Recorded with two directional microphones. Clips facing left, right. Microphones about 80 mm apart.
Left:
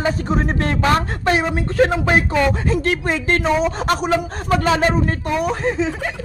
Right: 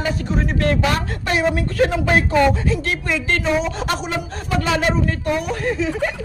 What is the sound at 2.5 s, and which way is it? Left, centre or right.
A man's voice, left.